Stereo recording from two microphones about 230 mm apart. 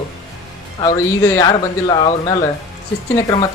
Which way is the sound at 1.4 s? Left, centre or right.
Centre.